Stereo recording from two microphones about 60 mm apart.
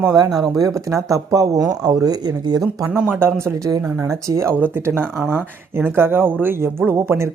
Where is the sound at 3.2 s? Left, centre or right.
Right.